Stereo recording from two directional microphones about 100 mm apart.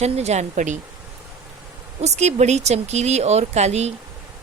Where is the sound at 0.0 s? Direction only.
90° right.